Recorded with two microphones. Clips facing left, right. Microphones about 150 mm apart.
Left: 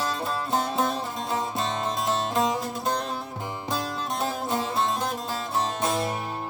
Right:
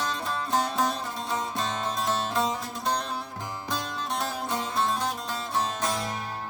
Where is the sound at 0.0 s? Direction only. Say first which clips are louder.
Left 2 dB; 5° left (ahead or behind).